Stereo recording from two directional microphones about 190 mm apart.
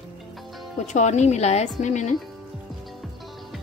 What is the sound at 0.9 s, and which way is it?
A woman's voice, 40° left (ahead or behind).